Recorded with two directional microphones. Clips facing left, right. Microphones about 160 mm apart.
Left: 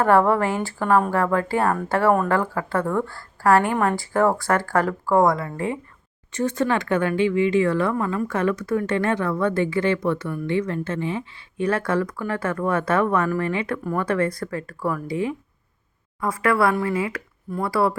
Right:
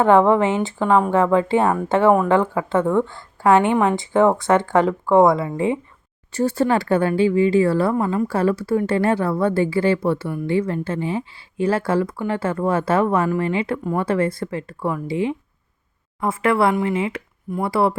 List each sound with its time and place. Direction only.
0.0 s speech: 20° right (ahead or behind)